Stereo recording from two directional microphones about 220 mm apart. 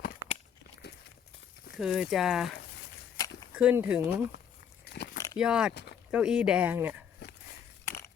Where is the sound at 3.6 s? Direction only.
5° right (ahead or behind).